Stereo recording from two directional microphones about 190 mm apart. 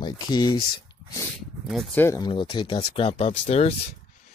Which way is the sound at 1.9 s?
15° left (ahead or behind).